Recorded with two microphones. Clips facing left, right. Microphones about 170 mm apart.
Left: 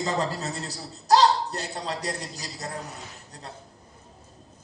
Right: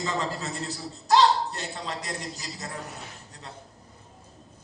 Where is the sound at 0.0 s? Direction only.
40° left (ahead or behind).